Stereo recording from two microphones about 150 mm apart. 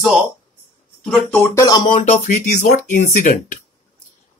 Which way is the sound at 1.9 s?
45° left (ahead or behind).